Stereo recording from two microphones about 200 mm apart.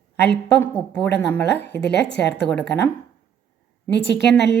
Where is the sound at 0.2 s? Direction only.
10° left (ahead or behind).